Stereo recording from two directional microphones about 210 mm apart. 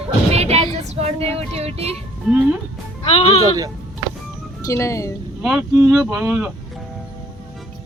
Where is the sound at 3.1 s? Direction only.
30° left (ahead or behind).